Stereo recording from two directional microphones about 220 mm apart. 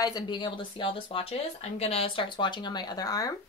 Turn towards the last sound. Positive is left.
turn(degrees=15)  # may be behind; listen again after turning